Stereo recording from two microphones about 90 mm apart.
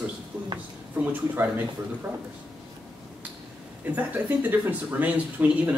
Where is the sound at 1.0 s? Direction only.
20° right (ahead or behind).